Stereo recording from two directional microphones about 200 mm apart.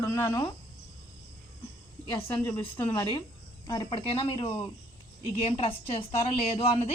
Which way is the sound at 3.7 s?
20° left (ahead or behind).